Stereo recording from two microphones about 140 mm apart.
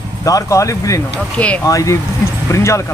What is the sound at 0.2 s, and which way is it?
Speech, 25° left (ahead or behind).